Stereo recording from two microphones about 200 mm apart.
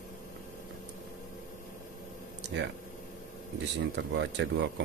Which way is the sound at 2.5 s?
65° right (ahead or behind).